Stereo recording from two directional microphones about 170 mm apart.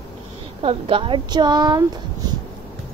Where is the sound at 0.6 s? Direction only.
30° right (ahead or behind).